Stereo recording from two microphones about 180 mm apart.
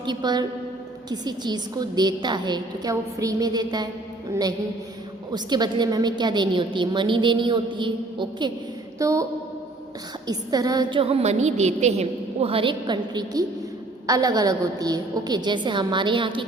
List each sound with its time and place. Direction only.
0.0 s a woman's voice: 25° right (ahead or behind)
5.3 s a woman's voice: 25° right (ahead or behind)
9.0 s a sound: 15° right (ahead or behind)
10.2 s a woman's voice: 20° right (ahead or behind)